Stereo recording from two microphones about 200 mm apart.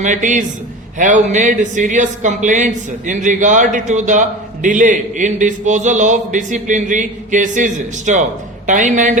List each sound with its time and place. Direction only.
0.0 s a man's voice: 40° right (ahead or behind)